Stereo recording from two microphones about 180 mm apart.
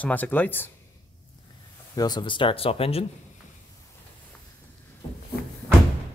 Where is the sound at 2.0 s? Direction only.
25° left (ahead or behind).